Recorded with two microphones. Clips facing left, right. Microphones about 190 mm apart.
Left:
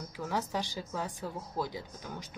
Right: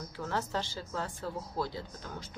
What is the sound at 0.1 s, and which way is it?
Speech, 15° left (ahead or behind).